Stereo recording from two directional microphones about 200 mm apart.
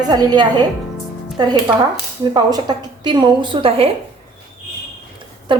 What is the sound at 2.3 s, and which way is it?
A woman's voice, 20° right (ahead or behind).